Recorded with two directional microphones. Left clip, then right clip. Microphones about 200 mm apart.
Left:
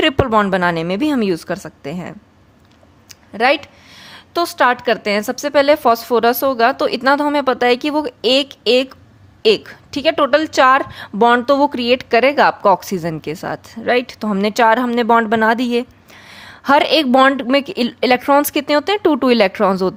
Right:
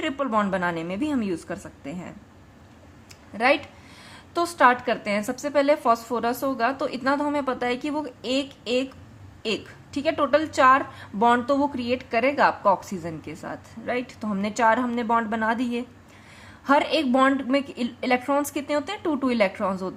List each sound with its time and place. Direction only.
0.0 s a woman's voice: 50° left (ahead or behind)